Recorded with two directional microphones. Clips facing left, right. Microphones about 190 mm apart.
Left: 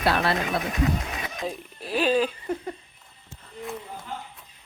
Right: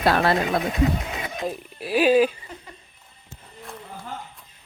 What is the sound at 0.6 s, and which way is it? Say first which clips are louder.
Speech: right 3 dB; 25° right (ahead or behind).